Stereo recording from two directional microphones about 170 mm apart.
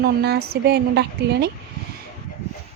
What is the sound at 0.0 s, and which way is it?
Speech, 70° right (ahead or behind).